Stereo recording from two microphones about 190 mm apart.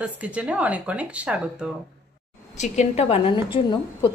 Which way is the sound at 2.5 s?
35° left (ahead or behind).